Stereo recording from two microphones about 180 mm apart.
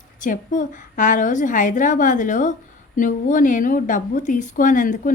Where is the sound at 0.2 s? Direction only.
45° left (ahead or behind).